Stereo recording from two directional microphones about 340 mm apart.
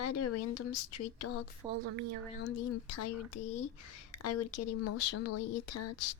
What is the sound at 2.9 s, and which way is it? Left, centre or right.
Speech, left.